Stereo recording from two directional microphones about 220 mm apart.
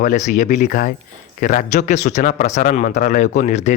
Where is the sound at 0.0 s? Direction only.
35° left (ahead or behind).